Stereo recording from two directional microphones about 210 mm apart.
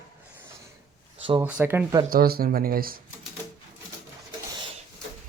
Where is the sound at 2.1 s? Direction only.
45° right (ahead or behind).